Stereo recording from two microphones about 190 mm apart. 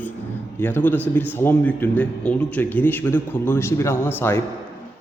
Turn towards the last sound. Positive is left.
turn(degrees=10)  # may be behind; listen again after turning